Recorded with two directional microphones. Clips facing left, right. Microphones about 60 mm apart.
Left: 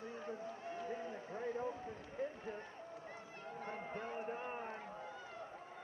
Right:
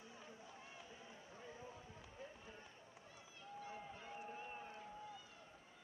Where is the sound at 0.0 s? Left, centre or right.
Left.